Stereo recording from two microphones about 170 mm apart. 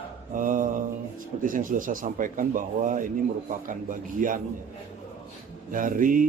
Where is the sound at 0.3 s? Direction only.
50° right (ahead or behind).